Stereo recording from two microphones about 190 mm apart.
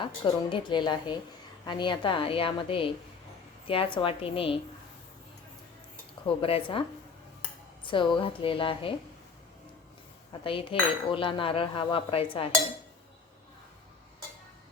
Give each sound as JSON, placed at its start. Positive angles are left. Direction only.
{"t": 0.0, "sound": "cutlery", "side_deg": 25}
{"t": 6.2, "sound": "cutlery", "side_deg": 30}
{"t": 7.9, "sound": "cutlery", "side_deg": 25}
{"t": 10.4, "sound": "cutlery", "side_deg": 30}